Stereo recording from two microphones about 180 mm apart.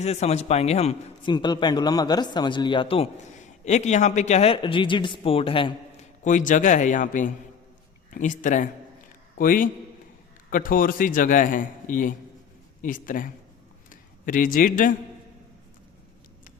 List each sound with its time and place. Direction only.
0.0 s a man's voice: 35° left (ahead or behind)
1.3 s a man's voice: 25° left (ahead or behind)
6.2 s a man's voice: 45° left (ahead or behind)